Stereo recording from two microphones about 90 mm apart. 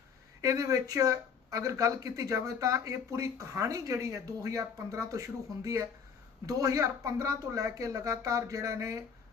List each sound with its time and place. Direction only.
0.4 s speech: 40° right (ahead or behind)